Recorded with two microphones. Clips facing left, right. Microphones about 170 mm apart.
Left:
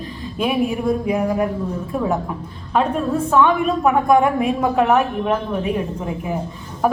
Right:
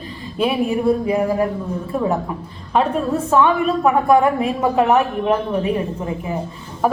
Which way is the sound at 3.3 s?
Centre (ahead or behind).